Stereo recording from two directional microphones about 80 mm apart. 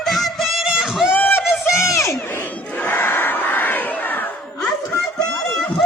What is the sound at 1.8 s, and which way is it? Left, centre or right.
Crowd, left.